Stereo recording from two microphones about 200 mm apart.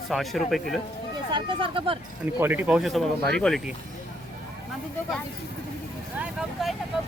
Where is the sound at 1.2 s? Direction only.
25° right (ahead or behind).